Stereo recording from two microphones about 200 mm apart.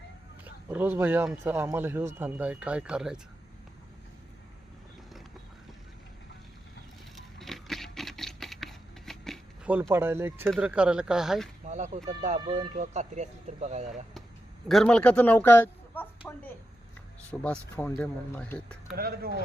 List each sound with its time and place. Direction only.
0.4 s a man's voice: 10° right (ahead or behind)
7.3 s a sound: centre (ahead or behind)
9.9 s a man's voice: 10° right (ahead or behind)
11.7 s speech: 35° right (ahead or behind)
14.7 s speech: centre (ahead or behind)
17.4 s speech: 5° left (ahead or behind)
18.9 s speech: 50° right (ahead or behind)